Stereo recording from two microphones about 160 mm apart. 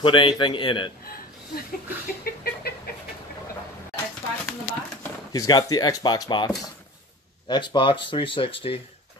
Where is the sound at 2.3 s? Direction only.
65° left (ahead or behind).